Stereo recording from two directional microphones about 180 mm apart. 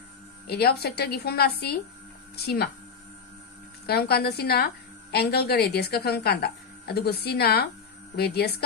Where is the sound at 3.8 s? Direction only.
60° left (ahead or behind).